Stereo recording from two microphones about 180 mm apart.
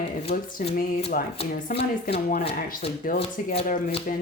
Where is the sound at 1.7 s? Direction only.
65° left (ahead or behind).